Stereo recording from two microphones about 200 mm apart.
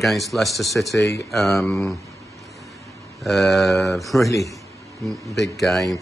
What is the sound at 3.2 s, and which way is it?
Speech, centre (ahead or behind).